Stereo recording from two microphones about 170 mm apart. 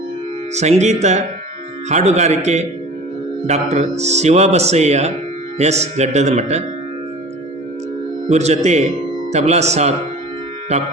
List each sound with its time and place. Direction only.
0.5 s speech: 40° right (ahead or behind)
8.3 s speech: 40° right (ahead or behind)